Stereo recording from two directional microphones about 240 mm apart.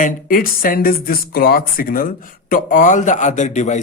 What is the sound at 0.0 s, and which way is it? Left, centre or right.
Speech, left.